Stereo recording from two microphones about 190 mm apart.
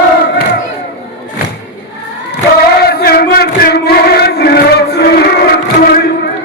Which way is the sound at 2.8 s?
55° left (ahead or behind).